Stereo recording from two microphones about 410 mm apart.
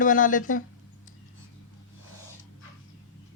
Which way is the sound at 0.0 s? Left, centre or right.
Centre.